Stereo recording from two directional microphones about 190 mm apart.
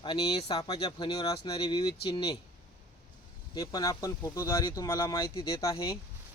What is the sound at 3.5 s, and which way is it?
Speech, 20° left (ahead or behind).